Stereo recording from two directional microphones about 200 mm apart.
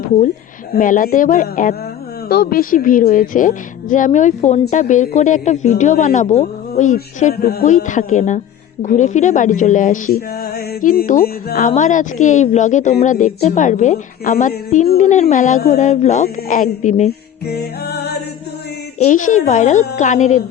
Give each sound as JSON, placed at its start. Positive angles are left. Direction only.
{"t": 0.7, "sound": "a woman's voice", "side_deg": 45}
{"t": 18.9, "sound": "a woman's voice", "side_deg": 40}